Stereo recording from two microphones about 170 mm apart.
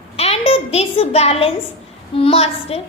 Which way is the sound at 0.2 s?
35° left (ahead or behind).